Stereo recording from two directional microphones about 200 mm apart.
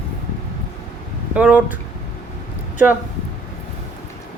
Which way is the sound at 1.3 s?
5° right (ahead or behind).